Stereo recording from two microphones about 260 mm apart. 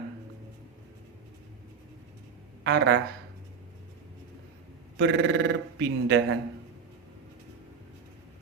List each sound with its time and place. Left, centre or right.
2.6 s speech: right
4.9 s a man's voice: right